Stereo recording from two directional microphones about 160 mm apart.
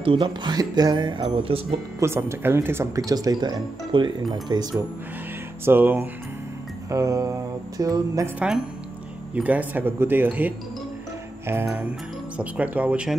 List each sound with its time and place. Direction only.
0.0 s speech: 30° right (ahead or behind)
2.0 s speech: 15° right (ahead or behind)
5.7 s speech: 15° right (ahead or behind)
6.9 s music: 20° right (ahead or behind)
9.3 s speech: 10° right (ahead or behind)